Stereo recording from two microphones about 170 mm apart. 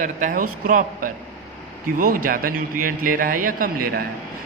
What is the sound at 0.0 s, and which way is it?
A man's voice, 50° right (ahead or behind).